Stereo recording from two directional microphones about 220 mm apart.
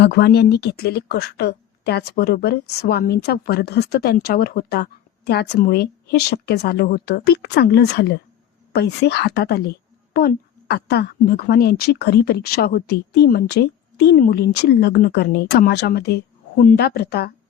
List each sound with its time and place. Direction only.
0.0 s a woman's voice: 50° left (ahead or behind)